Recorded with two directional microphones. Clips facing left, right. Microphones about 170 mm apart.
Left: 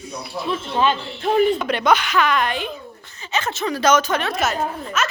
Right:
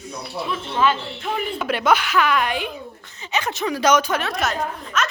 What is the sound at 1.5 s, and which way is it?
A woman's voice, 5° right (ahead or behind).